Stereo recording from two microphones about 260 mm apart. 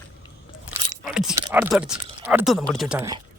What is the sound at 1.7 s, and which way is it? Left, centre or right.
Speech, centre.